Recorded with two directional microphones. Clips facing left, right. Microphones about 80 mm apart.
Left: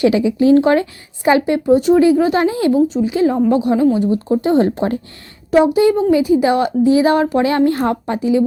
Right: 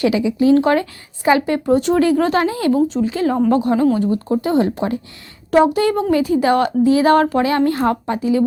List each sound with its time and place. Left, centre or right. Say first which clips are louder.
0.0 s a woman's voice: left 2 dB; left
1.7 s a woman's voice: left 4 dB; centre
2.4 s a woman's voice: left 2 dB; left
2.7 s speech: left 2 dB; centre
3.0 s a woman's voice: left 2 dB; centre
4.4 s a woman's voice: left 3 dB; left
5.5 s speech: left 1 dB; right
5.7 s a woman's voice: left 4 dB; centre
7.3 s a woman's voice: left 2 dB; left